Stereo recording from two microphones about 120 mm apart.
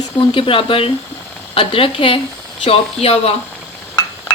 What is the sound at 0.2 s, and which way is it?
Speech, 45° left (ahead or behind).